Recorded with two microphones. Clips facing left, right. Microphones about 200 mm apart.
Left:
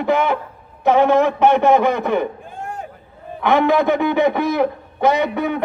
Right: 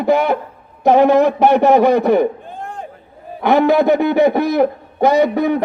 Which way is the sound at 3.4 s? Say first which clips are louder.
Right 3 dB; 40° right (ahead or behind).